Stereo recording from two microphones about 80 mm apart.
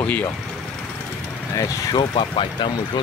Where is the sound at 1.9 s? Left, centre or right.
Left.